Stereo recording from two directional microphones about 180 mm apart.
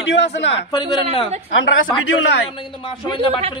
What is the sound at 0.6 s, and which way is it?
Speech, 25° left (ahead or behind).